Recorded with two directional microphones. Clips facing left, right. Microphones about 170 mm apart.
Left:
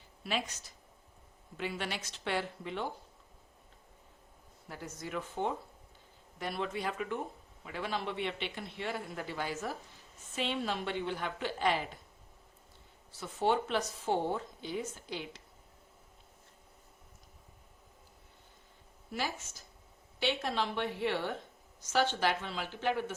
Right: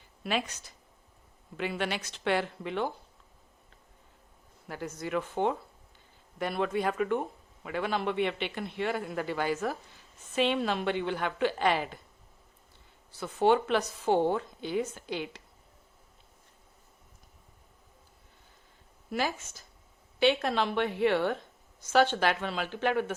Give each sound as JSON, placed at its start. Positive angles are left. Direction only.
{"t": 0.3, "sound": "a man's voice", "side_deg": -65}
{"t": 1.5, "sound": "speech", "side_deg": -75}
{"t": 4.7, "sound": "a woman's voice", "side_deg": -80}
{"t": 6.4, "sound": "a man's voice", "side_deg": -60}
{"t": 13.1, "sound": "a woman's voice", "side_deg": -70}
{"t": 20.1, "sound": "a man's voice", "side_deg": -60}